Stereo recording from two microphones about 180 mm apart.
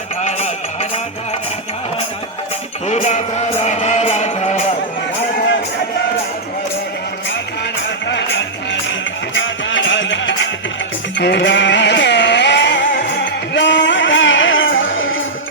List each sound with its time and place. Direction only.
0.2 s music: 40° left (ahead or behind)
2.8 s music: 40° left (ahead or behind)
8.0 s music: 80° left
11.2 s music: 75° left (ahead or behind)